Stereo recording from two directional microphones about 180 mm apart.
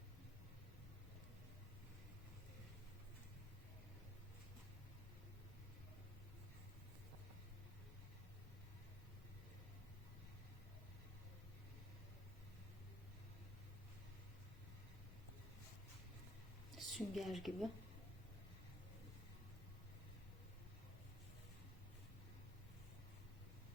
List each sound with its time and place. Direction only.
16.7 s a woman's voice: centre (ahead or behind)